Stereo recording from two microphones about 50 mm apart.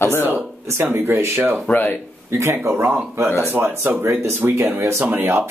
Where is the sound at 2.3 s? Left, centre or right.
Right.